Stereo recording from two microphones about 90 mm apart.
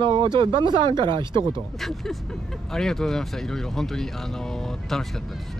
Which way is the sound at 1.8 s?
5° left (ahead or behind).